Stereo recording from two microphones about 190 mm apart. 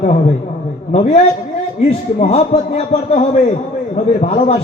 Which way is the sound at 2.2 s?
35° left (ahead or behind).